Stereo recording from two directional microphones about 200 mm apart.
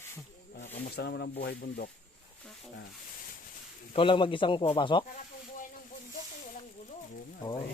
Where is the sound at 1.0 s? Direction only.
55° left (ahead or behind).